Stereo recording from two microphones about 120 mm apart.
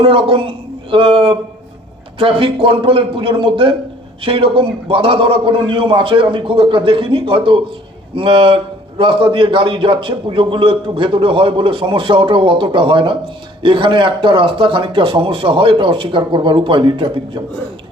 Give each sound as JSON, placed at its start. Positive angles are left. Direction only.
{"t": 0.0, "sound": "a man's voice", "side_deg": -45}